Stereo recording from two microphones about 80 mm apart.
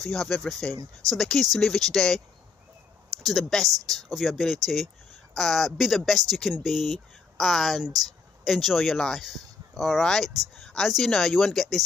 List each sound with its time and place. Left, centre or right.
0.0 s speech: centre
0.7 s speech: right
1.1 s speech: centre